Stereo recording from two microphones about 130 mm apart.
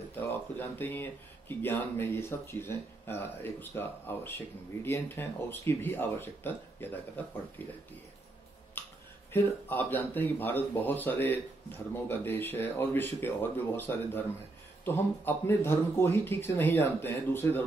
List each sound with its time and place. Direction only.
0.1 s speech: 15° left (ahead or behind)
8.8 s a sound: 15° left (ahead or behind)
9.3 s speech: 15° left (ahead or behind)